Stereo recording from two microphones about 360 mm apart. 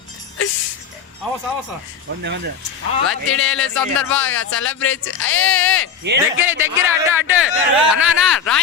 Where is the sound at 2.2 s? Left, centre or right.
Right.